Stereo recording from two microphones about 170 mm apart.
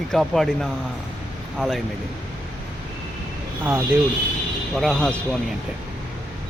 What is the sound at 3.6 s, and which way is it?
Speech, 10° right (ahead or behind).